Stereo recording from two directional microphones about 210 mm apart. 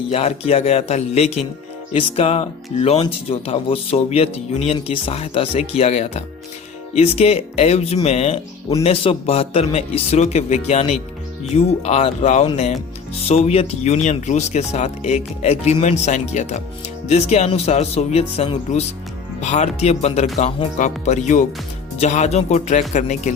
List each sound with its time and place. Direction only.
0.1 s speech: 30° left (ahead or behind)